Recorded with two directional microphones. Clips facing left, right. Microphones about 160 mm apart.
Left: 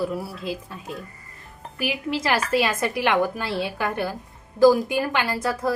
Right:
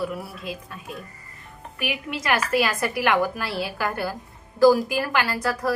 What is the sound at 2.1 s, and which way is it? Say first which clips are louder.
A woman's voice: left 1 dB; 30° left (ahead or behind).